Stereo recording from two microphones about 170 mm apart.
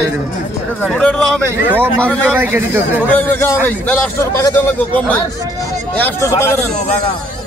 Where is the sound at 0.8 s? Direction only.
5° left (ahead or behind).